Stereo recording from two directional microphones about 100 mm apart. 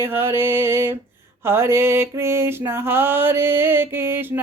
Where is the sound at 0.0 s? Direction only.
25° right (ahead or behind).